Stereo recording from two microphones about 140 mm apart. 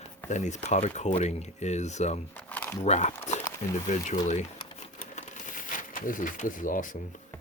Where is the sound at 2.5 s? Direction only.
10° left (ahead or behind).